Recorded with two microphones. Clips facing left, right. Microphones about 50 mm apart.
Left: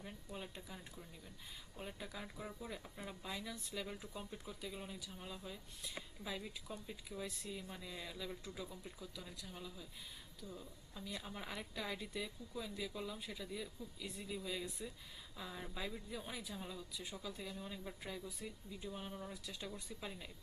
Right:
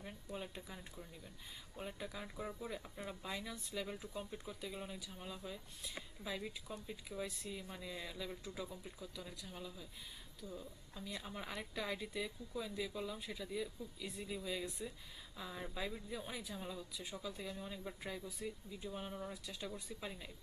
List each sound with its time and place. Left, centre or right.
0.0 s speech: centre